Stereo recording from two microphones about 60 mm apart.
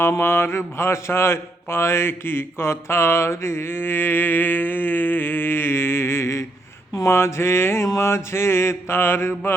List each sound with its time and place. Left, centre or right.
0.2 s mantra: left